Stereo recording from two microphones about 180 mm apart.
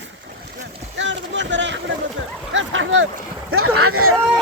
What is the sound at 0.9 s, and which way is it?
Speech, 90° right.